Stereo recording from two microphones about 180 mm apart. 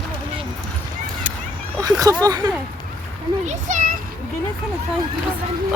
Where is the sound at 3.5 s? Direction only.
45° right (ahead or behind).